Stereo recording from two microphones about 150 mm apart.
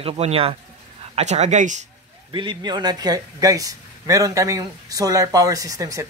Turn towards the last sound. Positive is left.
turn(degrees=-20)  # may be behind; listen again after turning